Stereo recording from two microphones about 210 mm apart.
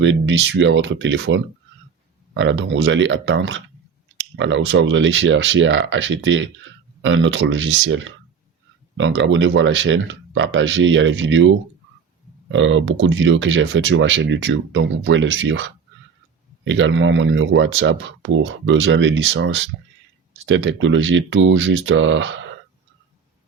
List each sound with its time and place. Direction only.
0.0 s speech: 60° right (ahead or behind)